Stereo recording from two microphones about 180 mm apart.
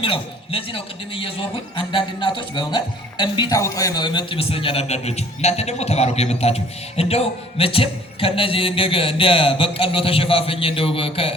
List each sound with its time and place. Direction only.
0.0 s speech: 30° left (ahead or behind)